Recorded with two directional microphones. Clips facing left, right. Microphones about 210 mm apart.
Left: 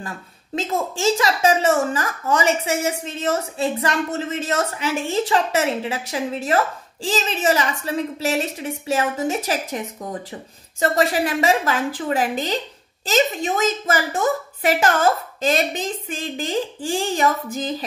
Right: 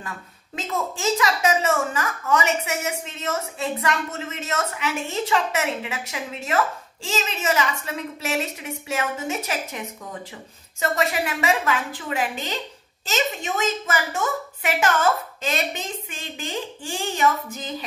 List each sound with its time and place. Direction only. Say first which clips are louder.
0.6 s a woman's voice: left 4 dB; 30° left (ahead or behind)